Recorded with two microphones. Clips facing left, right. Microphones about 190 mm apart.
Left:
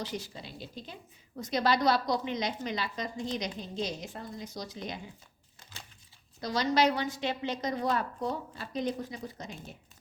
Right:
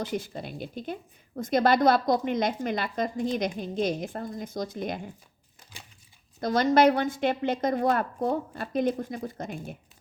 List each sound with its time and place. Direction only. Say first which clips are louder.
0.0 s a woman's voice: right 6 dB; 50° right (ahead or behind)
6.4 s a woman's voice: right 6 dB; 50° right (ahead or behind)